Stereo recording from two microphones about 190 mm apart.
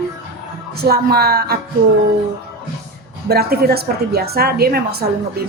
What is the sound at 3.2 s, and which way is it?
A woman's voice, 55° right (ahead or behind).